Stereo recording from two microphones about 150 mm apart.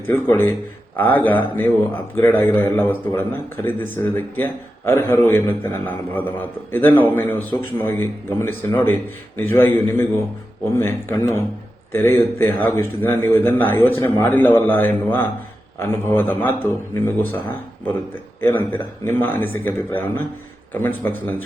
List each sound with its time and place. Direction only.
0.1 s speech: 15° left (ahead or behind)